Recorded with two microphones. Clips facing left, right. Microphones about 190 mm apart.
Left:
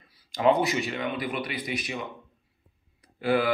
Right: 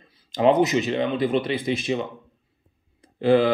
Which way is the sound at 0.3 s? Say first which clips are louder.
Right 5 dB; 20° right (ahead or behind).